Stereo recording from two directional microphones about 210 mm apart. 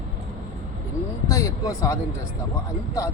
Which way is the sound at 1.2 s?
15° left (ahead or behind).